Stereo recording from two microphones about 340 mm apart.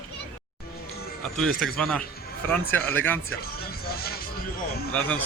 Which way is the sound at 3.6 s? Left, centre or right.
Left.